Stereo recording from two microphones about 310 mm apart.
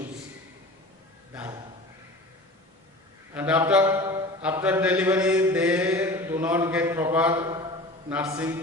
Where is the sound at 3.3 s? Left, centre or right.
Centre.